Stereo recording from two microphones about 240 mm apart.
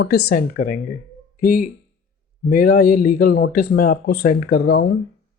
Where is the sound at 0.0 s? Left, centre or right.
Left.